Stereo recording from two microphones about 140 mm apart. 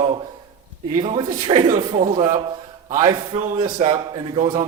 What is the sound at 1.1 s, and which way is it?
A man's voice, 30° right (ahead or behind).